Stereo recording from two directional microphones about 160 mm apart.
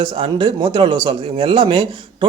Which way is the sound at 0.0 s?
30° right (ahead or behind).